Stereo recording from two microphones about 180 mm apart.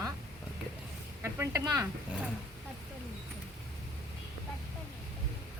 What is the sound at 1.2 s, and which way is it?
Speech, 15° right (ahead or behind).